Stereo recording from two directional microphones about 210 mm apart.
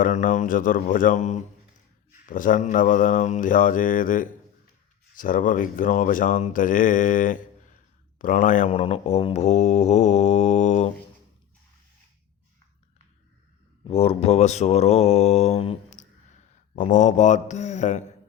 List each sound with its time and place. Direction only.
0.0 s speech: 35° left (ahead or behind)
8.7 s speech: 25° left (ahead or behind)
13.8 s speech: 30° left (ahead or behind)